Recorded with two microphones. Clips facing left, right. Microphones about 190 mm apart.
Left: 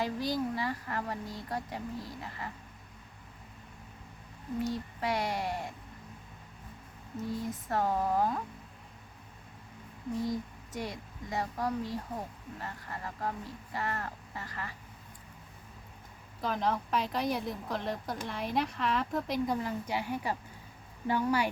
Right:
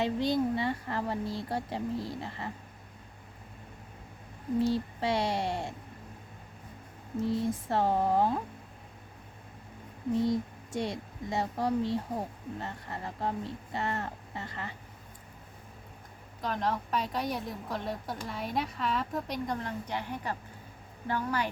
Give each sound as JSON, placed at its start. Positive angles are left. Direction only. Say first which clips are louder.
{"t": 0.0, "sound": "speech", "louder": "right 4 dB", "side_deg": -25}
{"t": 4.6, "sound": "speech", "louder": "right 4 dB", "side_deg": -30}
{"t": 7.2, "sound": "speech", "louder": "right 6 dB", "side_deg": -25}
{"t": 10.2, "sound": "speech", "louder": "right 5 dB", "side_deg": -25}
{"t": 16.4, "sound": "speech", "louder": "even", "side_deg": 0}